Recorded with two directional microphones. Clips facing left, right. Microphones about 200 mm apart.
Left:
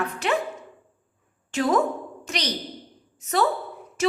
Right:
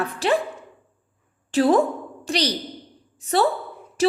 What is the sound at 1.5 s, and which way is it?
A woman's voice, 30° right (ahead or behind).